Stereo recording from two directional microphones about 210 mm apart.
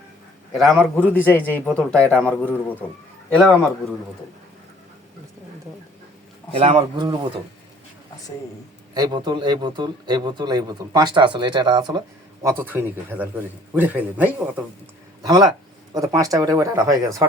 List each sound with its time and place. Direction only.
0.5 s a man's voice: centre (ahead or behind)
6.5 s speech: 25° right (ahead or behind)
9.0 s speech: 20° right (ahead or behind)